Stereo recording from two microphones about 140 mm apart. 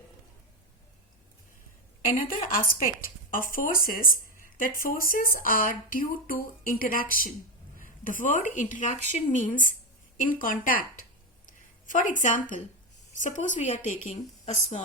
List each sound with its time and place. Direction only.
2.0 s a woman's voice: 80° left
7.8 s a woman's voice: 70° left (ahead or behind); by 14.8 s 55° left (ahead or behind)